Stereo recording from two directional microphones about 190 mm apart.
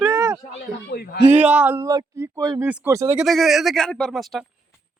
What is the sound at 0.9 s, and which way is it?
Speech, 55° left (ahead or behind).